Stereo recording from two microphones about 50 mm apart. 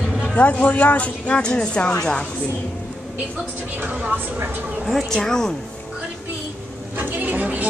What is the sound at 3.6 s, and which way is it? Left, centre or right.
A woman's voice, right.